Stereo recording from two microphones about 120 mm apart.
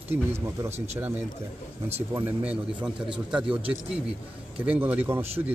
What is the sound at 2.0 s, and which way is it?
Speech, 15° right (ahead or behind).